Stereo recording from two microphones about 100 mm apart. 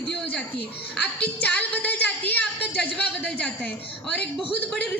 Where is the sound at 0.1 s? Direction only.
10° left (ahead or behind).